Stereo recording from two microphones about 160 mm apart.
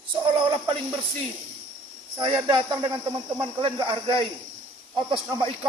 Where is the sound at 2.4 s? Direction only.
30° right (ahead or behind).